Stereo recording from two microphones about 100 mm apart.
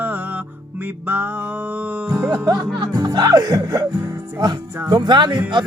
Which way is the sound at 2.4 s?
45° right (ahead or behind).